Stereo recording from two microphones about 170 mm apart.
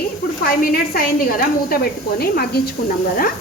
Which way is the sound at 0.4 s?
60° left (ahead or behind).